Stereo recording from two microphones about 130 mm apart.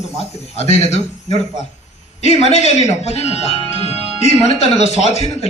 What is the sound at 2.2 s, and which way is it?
Speech, 55° left (ahead or behind).